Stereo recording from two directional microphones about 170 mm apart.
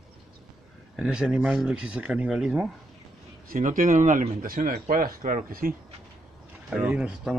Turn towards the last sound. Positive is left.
turn(degrees=-5)  # may be behind; listen again after turning